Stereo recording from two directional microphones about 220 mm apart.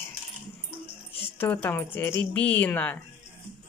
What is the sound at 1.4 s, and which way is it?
A woman's voice, 10° left (ahead or behind).